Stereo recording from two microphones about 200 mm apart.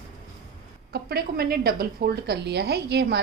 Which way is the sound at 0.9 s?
50° right (ahead or behind).